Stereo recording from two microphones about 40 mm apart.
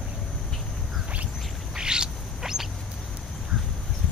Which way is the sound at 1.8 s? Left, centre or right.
Centre.